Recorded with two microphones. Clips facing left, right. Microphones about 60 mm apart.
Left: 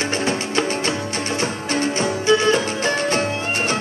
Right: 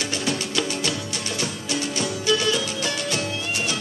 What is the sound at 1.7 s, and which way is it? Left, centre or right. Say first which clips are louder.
Music: left 6 dB; left.